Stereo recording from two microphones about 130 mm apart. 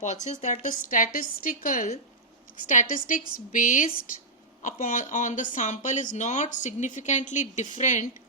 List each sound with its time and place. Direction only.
0.0 s a woman's voice: 65° left (ahead or behind)